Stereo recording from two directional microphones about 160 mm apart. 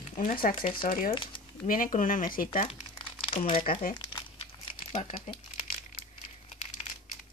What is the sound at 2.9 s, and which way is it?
Crumpling, 30° left (ahead or behind).